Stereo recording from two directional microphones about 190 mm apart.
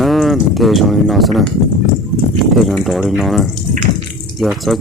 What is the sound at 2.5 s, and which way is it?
Speech, centre (ahead or behind).